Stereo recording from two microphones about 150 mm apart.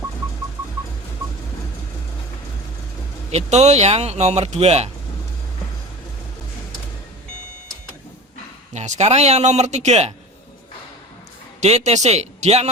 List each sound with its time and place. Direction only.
3.3 s speech: 50° right (ahead or behind)
8.7 s speech: 50° right (ahead or behind)
11.6 s speech: 45° right (ahead or behind)